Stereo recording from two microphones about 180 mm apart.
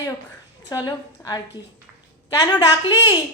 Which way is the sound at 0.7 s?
20° left (ahead or behind).